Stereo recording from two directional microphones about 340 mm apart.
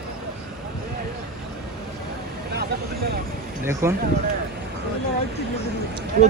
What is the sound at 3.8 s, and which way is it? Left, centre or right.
Speech, centre.